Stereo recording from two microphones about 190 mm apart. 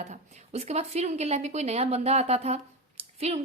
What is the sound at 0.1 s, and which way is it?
A woman's voice, 35° right (ahead or behind).